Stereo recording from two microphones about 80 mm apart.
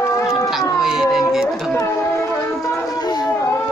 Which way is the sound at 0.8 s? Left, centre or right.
Centre.